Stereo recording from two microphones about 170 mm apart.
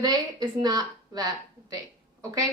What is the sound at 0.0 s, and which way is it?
A woman's voice, 25° right (ahead or behind).